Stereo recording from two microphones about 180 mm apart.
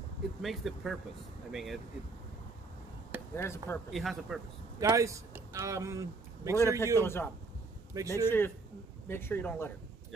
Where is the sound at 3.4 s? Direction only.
15° left (ahead or behind).